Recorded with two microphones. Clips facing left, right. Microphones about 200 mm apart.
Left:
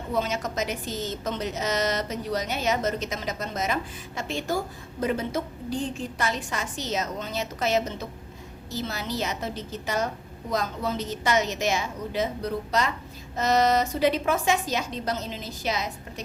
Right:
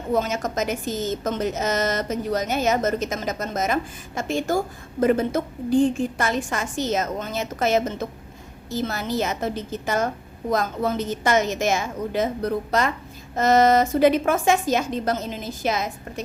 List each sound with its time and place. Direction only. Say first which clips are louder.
0.1 s a woman's voice: right 5 dB; 45° right (ahead or behind)